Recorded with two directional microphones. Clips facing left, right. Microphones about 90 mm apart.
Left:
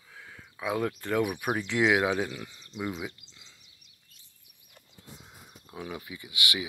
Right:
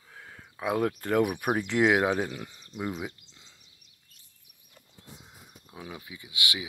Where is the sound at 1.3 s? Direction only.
20° right (ahead or behind).